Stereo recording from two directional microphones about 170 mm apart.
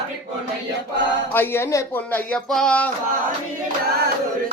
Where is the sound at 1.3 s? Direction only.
15° left (ahead or behind).